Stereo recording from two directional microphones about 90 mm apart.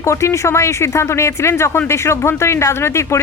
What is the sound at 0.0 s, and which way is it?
Speech, 30° left (ahead or behind).